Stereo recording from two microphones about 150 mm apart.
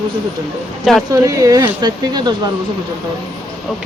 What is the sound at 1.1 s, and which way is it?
Speech, 20° right (ahead or behind).